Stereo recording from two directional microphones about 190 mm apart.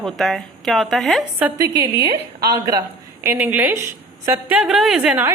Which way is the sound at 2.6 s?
15° right (ahead or behind).